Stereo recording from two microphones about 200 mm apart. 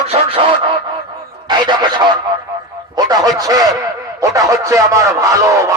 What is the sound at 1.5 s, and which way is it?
Speech, 20° right (ahead or behind).